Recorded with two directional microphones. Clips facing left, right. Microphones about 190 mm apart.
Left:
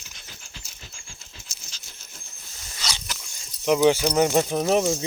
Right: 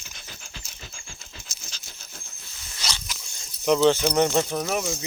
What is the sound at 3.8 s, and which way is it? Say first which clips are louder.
Speech: left 1 dB; 10° left (ahead or behind).